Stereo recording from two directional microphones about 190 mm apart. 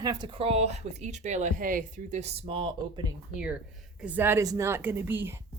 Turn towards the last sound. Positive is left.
turn(degrees=-10)  # may be behind; listen again after turning